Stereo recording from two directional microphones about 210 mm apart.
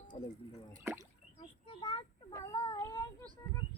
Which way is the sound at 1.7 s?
20° left (ahead or behind).